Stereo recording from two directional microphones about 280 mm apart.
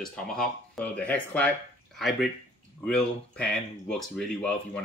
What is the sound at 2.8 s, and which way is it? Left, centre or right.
Speech, centre.